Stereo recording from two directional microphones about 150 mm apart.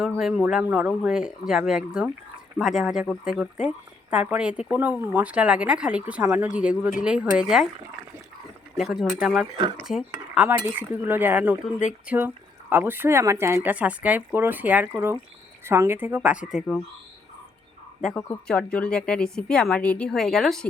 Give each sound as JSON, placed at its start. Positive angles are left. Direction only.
{"t": 0.0, "sound": "a woman's voice", "side_deg": -5}
{"t": 8.8, "sound": "a woman's voice", "side_deg": 0}
{"t": 18.4, "sound": "a woman's voice", "side_deg": 5}